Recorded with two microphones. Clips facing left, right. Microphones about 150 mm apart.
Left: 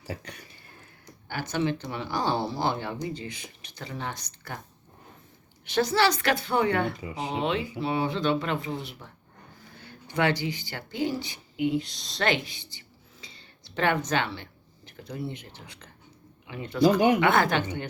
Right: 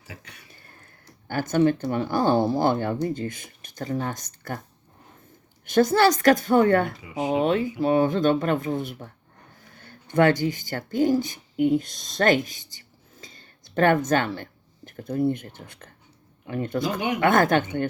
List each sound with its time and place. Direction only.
0.1 s speech: 40° left (ahead or behind)
1.3 s speech: 45° right (ahead or behind)
5.6 s speech: 50° right (ahead or behind)